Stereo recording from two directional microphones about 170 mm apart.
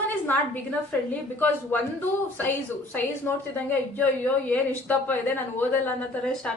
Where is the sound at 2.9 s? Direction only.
10° left (ahead or behind).